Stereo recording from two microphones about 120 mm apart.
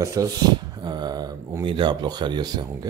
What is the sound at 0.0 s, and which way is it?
Speech, 30° right (ahead or behind).